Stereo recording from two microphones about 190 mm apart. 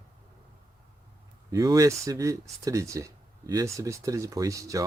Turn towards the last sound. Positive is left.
turn(degrees=-15)  # may be behind; listen again after turning